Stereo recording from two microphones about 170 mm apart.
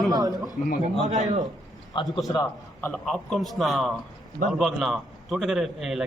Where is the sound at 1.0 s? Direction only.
45° right (ahead or behind).